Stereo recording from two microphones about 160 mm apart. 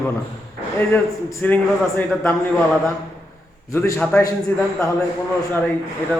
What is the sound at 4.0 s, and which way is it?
Speech, 10° left (ahead or behind).